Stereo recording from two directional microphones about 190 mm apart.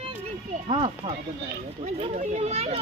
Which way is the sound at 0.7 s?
25° right (ahead or behind).